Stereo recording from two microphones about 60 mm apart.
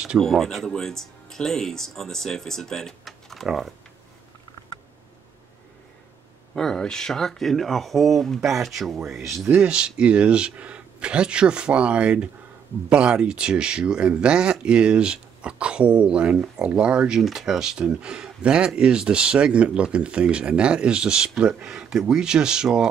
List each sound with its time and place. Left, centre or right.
0.2 s speech: centre
6.5 s speech: centre
9.6 s speech: centre
17.2 s speech: centre